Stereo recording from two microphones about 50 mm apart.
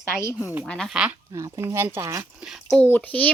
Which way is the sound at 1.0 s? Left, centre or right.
Centre.